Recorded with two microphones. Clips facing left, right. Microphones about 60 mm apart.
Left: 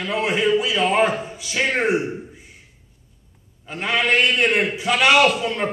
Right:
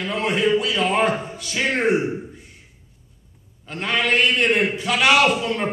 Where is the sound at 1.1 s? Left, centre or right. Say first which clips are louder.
Right 1 dB; centre.